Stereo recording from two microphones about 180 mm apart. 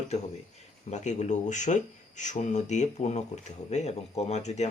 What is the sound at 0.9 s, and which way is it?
Speech, 40° left (ahead or behind).